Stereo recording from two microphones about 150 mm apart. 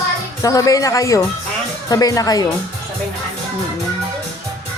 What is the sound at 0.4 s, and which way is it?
A man's voice, 25° left (ahead or behind).